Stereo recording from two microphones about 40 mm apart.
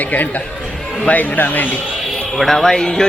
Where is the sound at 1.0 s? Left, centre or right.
Left.